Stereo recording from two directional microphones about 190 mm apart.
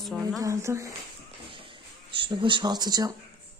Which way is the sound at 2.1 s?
25° right (ahead or behind).